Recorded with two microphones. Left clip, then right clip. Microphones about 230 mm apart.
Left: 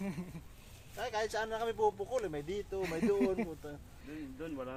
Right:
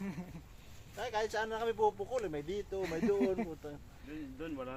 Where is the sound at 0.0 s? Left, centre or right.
Left.